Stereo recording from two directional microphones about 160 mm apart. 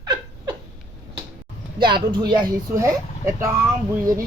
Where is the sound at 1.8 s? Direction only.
30° right (ahead or behind).